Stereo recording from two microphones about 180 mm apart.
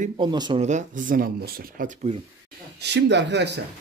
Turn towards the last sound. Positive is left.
turn(degrees=-75)  # may be behind; listen again after turning